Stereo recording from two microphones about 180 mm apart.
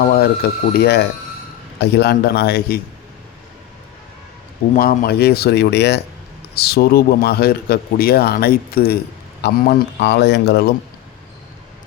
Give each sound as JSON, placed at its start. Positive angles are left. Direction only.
{"t": 0.0, "sound": "speech", "side_deg": 55}
{"t": 4.7, "sound": "speech", "side_deg": 50}